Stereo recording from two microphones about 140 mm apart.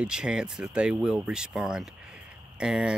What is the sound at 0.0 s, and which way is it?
Speech, 5° right (ahead or behind).